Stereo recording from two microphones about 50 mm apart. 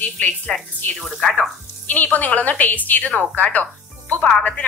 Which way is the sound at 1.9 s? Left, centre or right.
Left.